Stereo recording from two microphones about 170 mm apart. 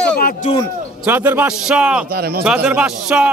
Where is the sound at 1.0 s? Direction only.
10° right (ahead or behind).